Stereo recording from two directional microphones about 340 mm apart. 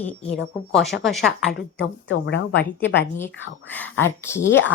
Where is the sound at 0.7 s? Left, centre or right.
Centre.